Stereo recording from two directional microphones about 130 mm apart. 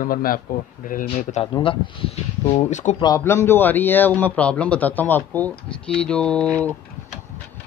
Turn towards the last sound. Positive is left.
turn(degrees=10)  # may be behind; listen again after turning